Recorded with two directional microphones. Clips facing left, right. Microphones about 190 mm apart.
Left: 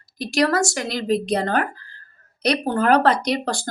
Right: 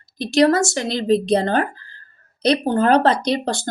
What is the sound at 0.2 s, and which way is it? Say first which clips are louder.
Speech: right 4 dB; 25° right (ahead or behind).